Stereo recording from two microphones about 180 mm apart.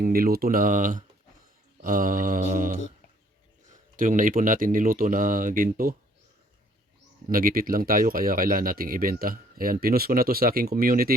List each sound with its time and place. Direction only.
0.0 s speech: 55° right (ahead or behind)
7.3 s speech: 50° right (ahead or behind)